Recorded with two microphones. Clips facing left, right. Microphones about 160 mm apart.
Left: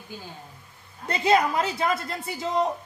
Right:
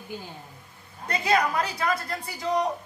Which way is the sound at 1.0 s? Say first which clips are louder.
Left 3 dB; 25° left (ahead or behind).